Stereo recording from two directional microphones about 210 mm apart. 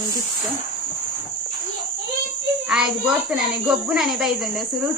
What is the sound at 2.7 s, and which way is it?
A child's voice, 5° right (ahead or behind).